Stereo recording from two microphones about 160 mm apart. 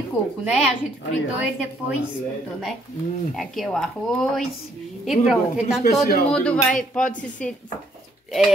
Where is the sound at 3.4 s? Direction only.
Centre (ahead or behind).